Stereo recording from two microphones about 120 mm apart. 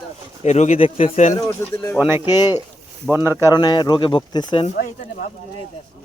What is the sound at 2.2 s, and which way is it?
Speech, 35° left (ahead or behind).